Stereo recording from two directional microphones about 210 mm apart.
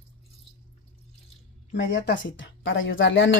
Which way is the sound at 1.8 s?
55° left (ahead or behind).